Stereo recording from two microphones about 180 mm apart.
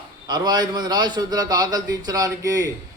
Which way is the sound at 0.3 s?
20° right (ahead or behind).